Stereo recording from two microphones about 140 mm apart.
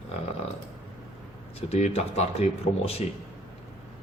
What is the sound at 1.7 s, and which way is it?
Speech, 50° left (ahead or behind).